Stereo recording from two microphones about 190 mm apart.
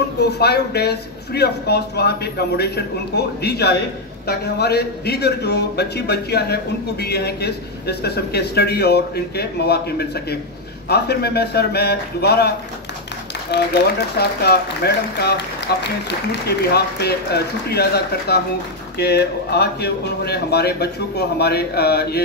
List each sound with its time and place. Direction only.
0.2 s a man's voice: 60° left (ahead or behind)